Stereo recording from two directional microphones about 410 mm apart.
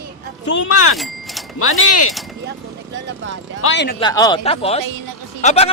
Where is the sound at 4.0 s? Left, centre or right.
Centre.